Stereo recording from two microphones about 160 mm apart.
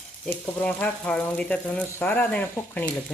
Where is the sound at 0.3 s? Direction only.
10° left (ahead or behind).